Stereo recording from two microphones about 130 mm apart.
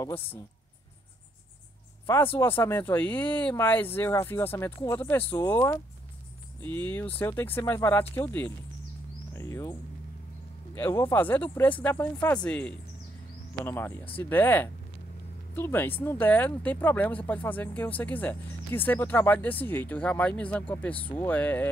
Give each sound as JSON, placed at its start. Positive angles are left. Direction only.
{"t": 0.0, "sound": "speech", "side_deg": 15}
{"t": 2.3, "sound": "speech", "side_deg": 15}